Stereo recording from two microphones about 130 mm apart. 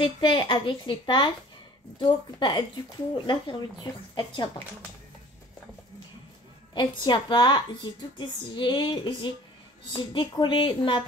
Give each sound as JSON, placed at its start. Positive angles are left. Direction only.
{"t": 0.0, "sound": "a woman's voice", "side_deg": 40}
{"t": 6.7, "sound": "a woman's voice", "side_deg": 35}